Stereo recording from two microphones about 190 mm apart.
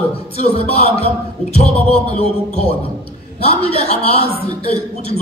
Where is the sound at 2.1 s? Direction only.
35° left (ahead or behind).